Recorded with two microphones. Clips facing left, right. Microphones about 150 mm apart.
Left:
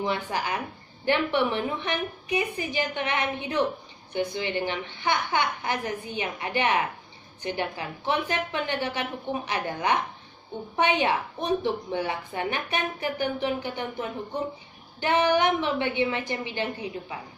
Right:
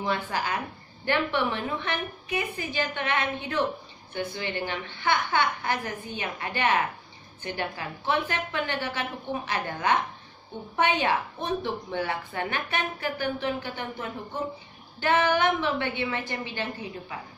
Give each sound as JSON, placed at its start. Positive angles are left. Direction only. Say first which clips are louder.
{"t": 0.0, "sound": "a woman's voice", "louder": "left 1 dB", "side_deg": 15}